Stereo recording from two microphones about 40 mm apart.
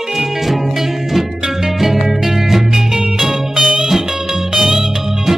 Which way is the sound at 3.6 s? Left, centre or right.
Centre.